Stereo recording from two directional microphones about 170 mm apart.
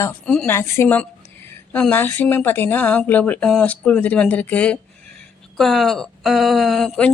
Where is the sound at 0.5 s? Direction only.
15° left (ahead or behind).